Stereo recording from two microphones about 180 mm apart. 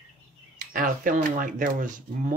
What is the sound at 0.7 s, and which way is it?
Speech, 50° right (ahead or behind).